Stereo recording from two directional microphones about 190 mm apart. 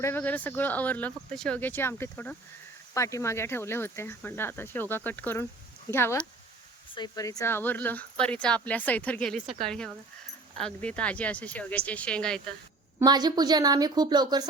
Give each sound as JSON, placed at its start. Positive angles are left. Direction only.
{"t": 0.0, "sound": "a woman's voice", "side_deg": 10}
{"t": 13.0, "sound": "a woman's voice", "side_deg": -20}